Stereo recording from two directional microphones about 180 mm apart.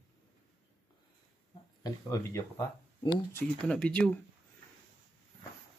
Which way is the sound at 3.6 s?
5° left (ahead or behind).